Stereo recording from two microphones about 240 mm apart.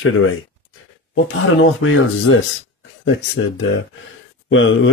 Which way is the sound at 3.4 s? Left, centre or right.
Left.